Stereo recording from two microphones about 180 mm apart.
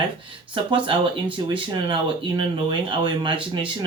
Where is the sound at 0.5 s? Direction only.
30° right (ahead or behind).